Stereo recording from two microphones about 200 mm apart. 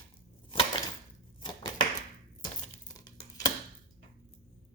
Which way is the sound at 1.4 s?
25° left (ahead or behind).